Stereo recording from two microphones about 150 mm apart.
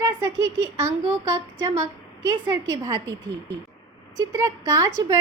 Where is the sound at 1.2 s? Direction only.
20° right (ahead or behind).